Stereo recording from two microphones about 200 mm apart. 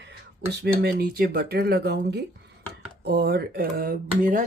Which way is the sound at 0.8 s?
50° right (ahead or behind).